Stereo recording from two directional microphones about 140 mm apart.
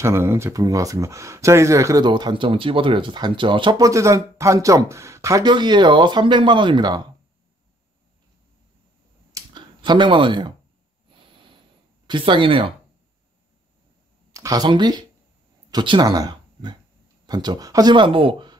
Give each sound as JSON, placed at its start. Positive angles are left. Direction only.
{"t": 0.0, "sound": "speech", "side_deg": -20}
{"t": 5.5, "sound": "speech", "side_deg": -30}
{"t": 9.3, "sound": "clicking", "side_deg": -35}
{"t": 11.1, "sound": "a sound", "side_deg": -40}
{"t": 12.1, "sound": "speech", "side_deg": -35}
{"t": 14.3, "sound": "speech", "side_deg": -25}